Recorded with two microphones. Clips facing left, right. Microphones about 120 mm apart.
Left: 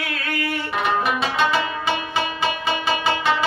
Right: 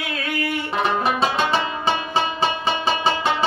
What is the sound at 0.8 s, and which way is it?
Music, 30° right (ahead or behind).